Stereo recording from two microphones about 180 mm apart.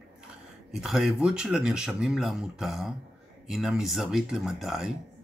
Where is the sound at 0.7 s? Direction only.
5° right (ahead or behind).